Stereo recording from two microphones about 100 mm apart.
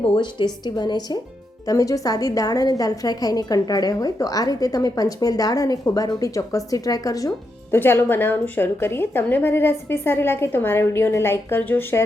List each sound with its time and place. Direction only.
0.0 s a woman's voice: 60° left (ahead or behind)
1.6 s a woman's voice: 35° left (ahead or behind)
7.7 s a woman's voice: 25° left (ahead or behind)